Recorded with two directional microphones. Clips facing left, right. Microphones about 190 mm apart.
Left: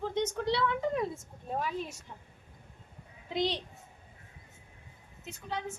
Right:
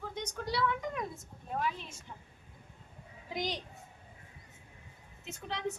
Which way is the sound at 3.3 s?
25° left (ahead or behind).